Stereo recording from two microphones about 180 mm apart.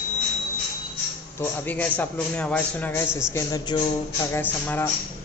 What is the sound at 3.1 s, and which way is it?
Speech, 5° right (ahead or behind).